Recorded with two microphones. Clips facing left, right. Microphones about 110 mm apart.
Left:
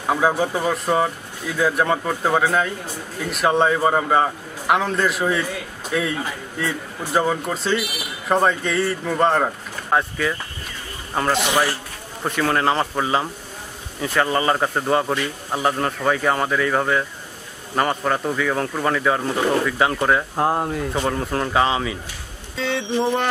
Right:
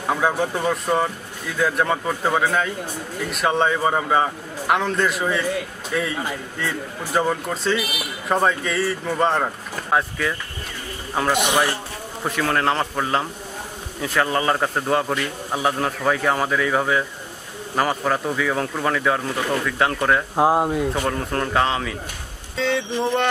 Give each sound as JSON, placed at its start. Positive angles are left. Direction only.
{"t": 0.0, "sound": "a man's voice", "side_deg": 5}
{"t": 6.6, "sound": "a man's voice", "side_deg": 0}
{"t": 11.1, "sound": "a man's voice", "side_deg": -15}
{"t": 12.2, "sound": "a man's voice", "side_deg": 0}
{"t": 20.3, "sound": "a man's voice", "side_deg": -15}
{"t": 20.9, "sound": "a man's voice", "side_deg": 0}